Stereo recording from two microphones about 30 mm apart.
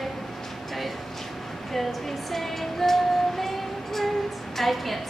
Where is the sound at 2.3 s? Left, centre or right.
Centre.